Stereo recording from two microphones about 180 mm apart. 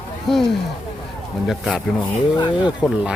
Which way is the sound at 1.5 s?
5° left (ahead or behind).